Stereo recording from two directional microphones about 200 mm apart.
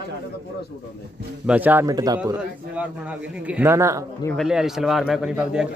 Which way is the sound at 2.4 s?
5° right (ahead or behind).